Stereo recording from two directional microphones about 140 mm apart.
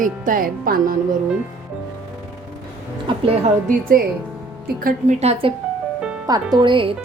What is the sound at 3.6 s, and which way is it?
Speech, 90° right.